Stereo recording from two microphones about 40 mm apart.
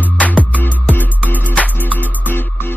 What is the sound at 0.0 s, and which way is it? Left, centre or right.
Music, left.